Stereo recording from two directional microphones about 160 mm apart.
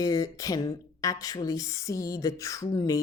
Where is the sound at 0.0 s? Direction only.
20° left (ahead or behind).